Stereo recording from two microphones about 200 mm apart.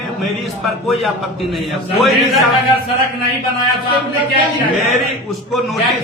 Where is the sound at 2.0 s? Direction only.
Centre (ahead or behind).